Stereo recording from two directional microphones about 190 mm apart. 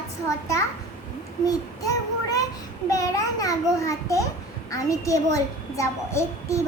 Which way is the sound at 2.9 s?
15° left (ahead or behind).